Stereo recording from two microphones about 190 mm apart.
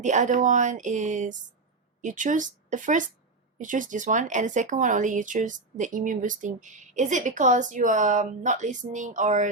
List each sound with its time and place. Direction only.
0.0 s speech: 40° right (ahead or behind)